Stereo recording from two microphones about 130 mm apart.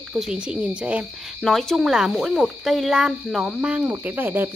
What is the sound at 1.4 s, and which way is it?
Speech, centre (ahead or behind).